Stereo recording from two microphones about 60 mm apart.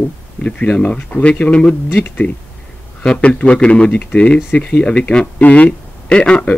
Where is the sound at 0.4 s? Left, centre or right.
Centre.